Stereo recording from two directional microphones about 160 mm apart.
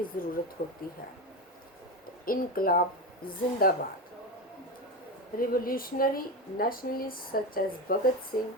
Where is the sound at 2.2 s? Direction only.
65° left (ahead or behind).